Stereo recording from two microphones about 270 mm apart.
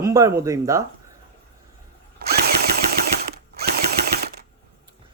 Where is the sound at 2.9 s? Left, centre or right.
Right.